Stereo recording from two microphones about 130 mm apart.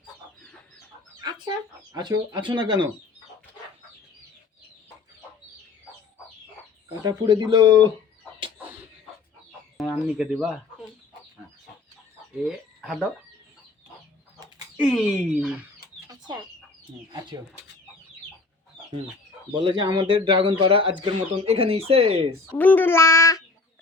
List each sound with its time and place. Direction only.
1.2 s chicken: 35° right (ahead or behind)
7.0 s speech: 35° right (ahead or behind)
10.2 s speech: centre (ahead or behind)
12.5 s speech: 5° right (ahead or behind)
14.8 s speech: centre (ahead or behind)
16.0 s chicken: 35° right (ahead or behind)
19.5 s speech: 35° right (ahead or behind)
22.5 s child singing: 15° left (ahead or behind)